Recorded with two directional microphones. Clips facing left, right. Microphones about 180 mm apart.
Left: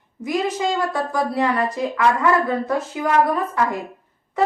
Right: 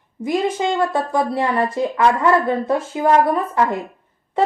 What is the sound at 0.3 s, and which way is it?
A woman's voice, 25° right (ahead or behind).